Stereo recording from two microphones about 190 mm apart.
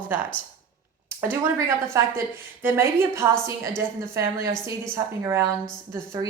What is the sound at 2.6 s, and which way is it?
A woman's voice, 10° right (ahead or behind).